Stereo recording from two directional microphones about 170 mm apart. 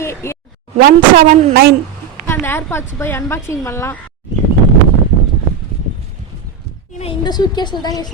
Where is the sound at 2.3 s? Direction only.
15° left (ahead or behind).